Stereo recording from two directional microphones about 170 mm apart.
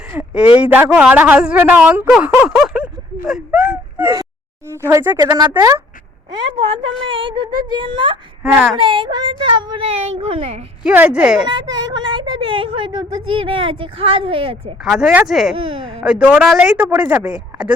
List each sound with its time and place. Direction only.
0.1 s speech: 10° right (ahead or behind)
7.1 s speech: 30° right (ahead or behind)
8.5 s speech: 5° right (ahead or behind)
8.8 s speech: 30° right (ahead or behind)
10.8 s speech: 10° right (ahead or behind)
11.4 s speech: 25° right (ahead or behind)
14.8 s speech: 5° right (ahead or behind)
15.5 s speech: 30° right (ahead or behind)
16.0 s speech: 5° right (ahead or behind)